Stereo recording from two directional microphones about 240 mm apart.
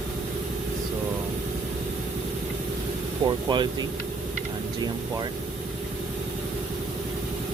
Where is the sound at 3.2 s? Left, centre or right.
Centre.